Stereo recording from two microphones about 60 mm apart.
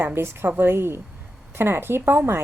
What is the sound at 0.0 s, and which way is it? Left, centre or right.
A woman's voice, right.